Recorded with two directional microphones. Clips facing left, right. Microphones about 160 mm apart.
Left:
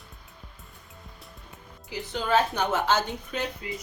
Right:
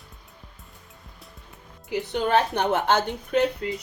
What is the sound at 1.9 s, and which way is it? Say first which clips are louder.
A woman's voice: right 3 dB; 60° right (ahead or behind).